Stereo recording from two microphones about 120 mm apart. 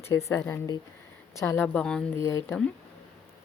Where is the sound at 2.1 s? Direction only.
25° left (ahead or behind).